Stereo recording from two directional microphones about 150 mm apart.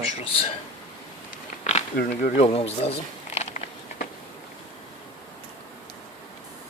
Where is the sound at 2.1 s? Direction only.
50° left (ahead or behind).